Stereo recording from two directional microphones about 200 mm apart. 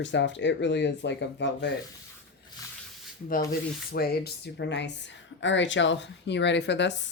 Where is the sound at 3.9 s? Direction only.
50° left (ahead or behind).